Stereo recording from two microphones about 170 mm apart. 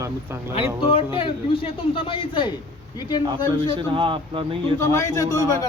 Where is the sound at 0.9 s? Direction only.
30° left (ahead or behind).